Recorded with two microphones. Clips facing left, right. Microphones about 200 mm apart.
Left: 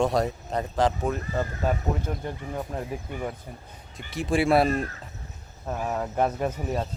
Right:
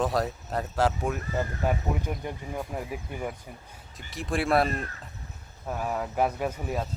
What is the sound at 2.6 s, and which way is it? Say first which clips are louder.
Speech: left 2 dB; 5° right (ahead or behind).